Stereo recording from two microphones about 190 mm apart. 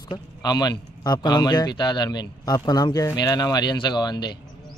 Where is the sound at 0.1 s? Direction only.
20° left (ahead or behind).